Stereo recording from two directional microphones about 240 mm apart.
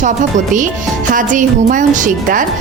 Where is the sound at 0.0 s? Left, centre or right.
Right.